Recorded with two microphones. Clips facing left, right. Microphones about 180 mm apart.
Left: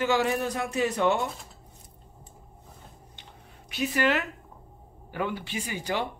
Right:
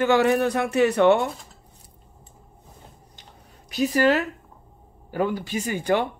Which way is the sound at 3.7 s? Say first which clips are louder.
Right 6 dB; 40° right (ahead or behind).